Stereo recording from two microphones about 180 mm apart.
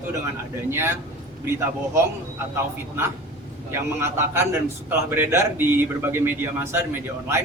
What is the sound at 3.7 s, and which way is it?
A man's voice, 15° right (ahead or behind).